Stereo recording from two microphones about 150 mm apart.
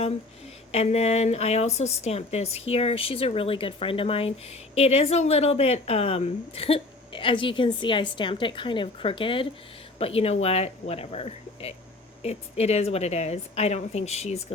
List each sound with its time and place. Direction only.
0.7 s speech: 45° left (ahead or behind)